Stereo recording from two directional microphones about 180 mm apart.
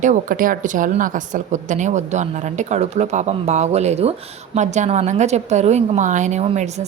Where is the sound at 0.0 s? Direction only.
45° right (ahead or behind).